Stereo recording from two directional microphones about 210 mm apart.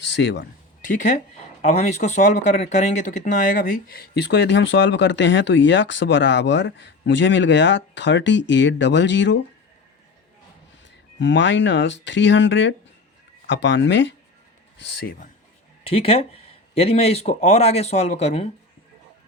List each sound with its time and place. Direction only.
0.0 s a man's voice: 55° left (ahead or behind)
0.9 s speech: 40° left (ahead or behind); by 9.4 s 60° left (ahead or behind)
11.2 s speech: 60° left (ahead or behind)
15.8 s speech: 25° left (ahead or behind)